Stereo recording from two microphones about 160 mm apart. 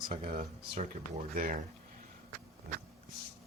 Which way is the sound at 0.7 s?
45° right (ahead or behind).